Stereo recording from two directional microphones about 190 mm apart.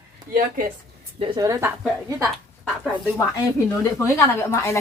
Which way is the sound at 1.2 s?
20° right (ahead or behind).